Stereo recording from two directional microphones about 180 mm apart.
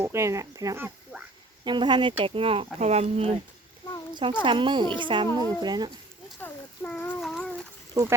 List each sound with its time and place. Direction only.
0.0 s speech: 15° right (ahead or behind)
6.4 s a sound: 10° left (ahead or behind)
8.0 s speech: 20° right (ahead or behind)